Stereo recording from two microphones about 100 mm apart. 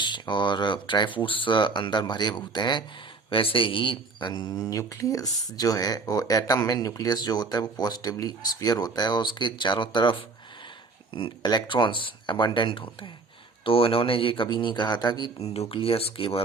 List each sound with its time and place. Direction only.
0.0 s speech: 50° left (ahead or behind)
3.2 s speech: 60° left (ahead or behind)
15.4 s speech: 90° left; by 16.4 s 70° left (ahead or behind)